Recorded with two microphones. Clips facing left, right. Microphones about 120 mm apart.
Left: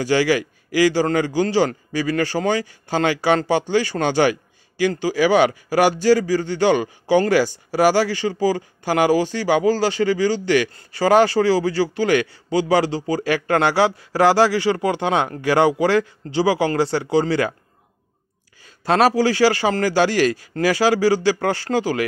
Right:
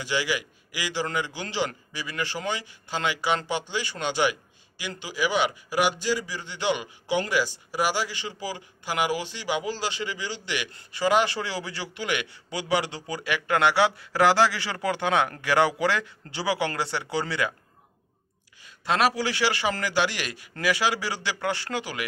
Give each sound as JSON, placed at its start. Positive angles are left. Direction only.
{"t": 0.0, "sound": "a man's voice", "side_deg": 45}
{"t": 18.9, "sound": "a man's voice", "side_deg": 35}